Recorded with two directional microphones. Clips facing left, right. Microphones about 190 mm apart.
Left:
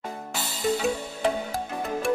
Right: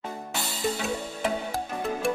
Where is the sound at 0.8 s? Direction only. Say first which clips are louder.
Left 3 dB; centre (ahead or behind).